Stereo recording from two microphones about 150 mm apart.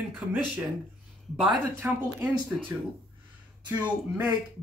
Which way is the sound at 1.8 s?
15° right (ahead or behind).